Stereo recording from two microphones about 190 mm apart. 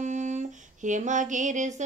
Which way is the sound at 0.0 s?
40° right (ahead or behind).